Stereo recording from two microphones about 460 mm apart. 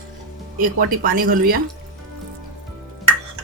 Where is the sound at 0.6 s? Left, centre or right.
Centre.